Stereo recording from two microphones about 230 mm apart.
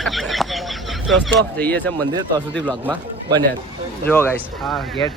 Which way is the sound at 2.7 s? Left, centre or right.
Centre.